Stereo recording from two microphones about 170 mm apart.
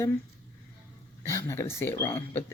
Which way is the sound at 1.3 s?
15° left (ahead or behind).